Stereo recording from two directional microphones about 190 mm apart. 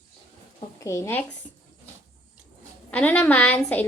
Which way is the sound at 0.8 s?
15° left (ahead or behind).